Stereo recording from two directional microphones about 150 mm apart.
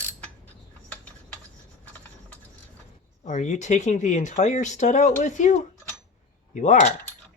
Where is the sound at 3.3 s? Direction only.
55° left (ahead or behind).